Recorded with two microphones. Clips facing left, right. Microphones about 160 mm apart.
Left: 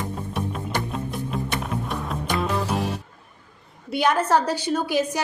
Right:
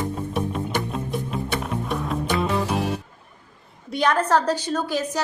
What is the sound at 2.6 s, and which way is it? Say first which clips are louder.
Music: right 1 dB; 15° right (ahead or behind).